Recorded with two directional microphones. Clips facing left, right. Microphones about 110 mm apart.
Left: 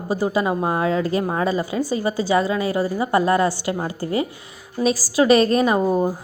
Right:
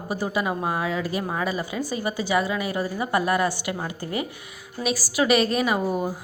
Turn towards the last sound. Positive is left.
turn(degrees=30)  # may be behind; listen again after turning